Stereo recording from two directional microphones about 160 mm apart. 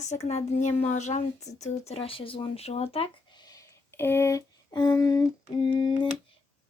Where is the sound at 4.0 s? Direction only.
15° left (ahead or behind).